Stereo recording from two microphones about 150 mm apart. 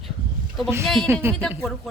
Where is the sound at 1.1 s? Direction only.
15° right (ahead or behind).